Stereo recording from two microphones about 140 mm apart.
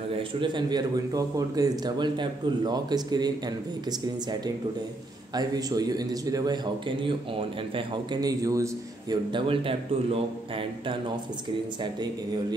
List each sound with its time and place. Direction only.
0.1 s a man's voice: 35° right (ahead or behind)
5.3 s a man's voice: 30° right (ahead or behind)
9.1 s speech: 35° right (ahead or behind)
11.8 s speech: 30° right (ahead or behind)